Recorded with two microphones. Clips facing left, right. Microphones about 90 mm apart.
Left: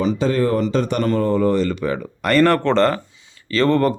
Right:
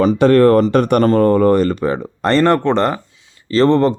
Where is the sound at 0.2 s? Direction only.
65° right (ahead or behind); by 3.0 s 15° right (ahead or behind).